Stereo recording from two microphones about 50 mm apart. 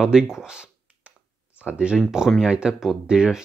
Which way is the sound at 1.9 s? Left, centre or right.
Centre.